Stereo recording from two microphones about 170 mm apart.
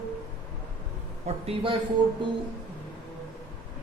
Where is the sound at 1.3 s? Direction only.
40° right (ahead or behind).